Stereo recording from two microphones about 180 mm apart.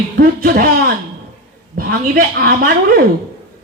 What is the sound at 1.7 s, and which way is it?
Speech, 55° right (ahead or behind).